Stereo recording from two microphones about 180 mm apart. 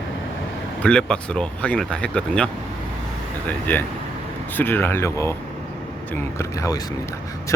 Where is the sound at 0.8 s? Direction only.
5° left (ahead or behind).